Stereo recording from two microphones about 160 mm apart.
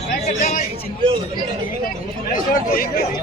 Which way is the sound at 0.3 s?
50° left (ahead or behind).